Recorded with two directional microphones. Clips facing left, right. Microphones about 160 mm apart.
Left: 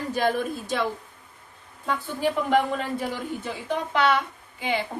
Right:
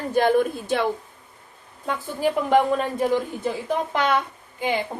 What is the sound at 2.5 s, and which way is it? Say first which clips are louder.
A woman's voice: right 4 dB; 40° right (ahead or behind).